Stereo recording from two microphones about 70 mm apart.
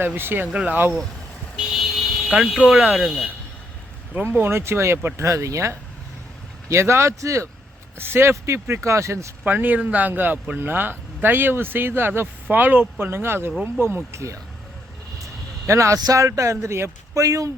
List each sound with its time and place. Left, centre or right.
0.2 s speech: right
0.5 s speech: centre
1.5 s vehicle: centre
2.6 s speech: centre
4.1 s speech: right
7.9 s speech: right
9.4 s speech: right
15.2 s a sound: right
16.0 s speech: right